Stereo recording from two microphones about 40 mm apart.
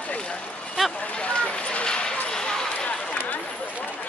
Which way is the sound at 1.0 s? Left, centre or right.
Left.